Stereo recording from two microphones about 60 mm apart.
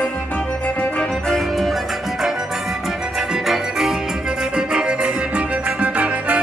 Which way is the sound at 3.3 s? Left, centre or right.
Centre.